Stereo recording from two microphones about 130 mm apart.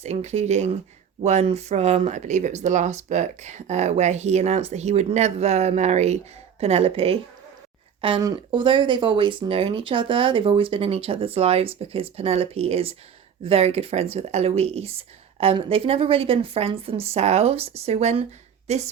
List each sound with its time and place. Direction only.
0.0 s speech: 60° right (ahead or behind)
8.2 s speech: 35° right (ahead or behind); by 18.8 s 55° right (ahead or behind)